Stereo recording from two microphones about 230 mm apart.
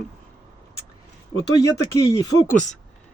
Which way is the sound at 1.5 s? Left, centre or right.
Centre.